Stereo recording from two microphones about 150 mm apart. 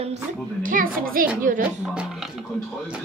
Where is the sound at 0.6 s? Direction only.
70° right (ahead or behind).